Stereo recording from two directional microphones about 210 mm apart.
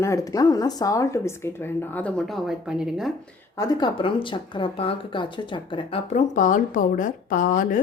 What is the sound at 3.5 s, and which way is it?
Speech, 20° left (ahead or behind).